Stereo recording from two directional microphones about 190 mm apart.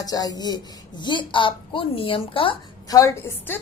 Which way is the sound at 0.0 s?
20° left (ahead or behind).